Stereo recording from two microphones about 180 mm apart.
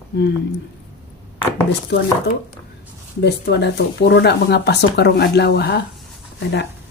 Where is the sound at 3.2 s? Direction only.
70° left (ahead or behind).